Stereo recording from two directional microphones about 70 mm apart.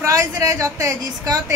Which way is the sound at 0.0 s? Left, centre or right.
Right.